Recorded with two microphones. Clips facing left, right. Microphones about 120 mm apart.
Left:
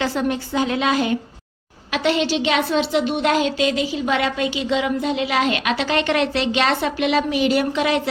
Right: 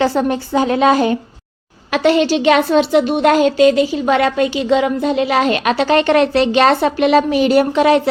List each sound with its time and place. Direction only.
0.0 s a woman's voice: 40° right (ahead or behind)